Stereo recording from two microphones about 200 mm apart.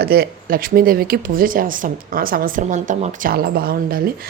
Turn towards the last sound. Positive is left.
turn(degrees=-45)  # may be behind; listen again after turning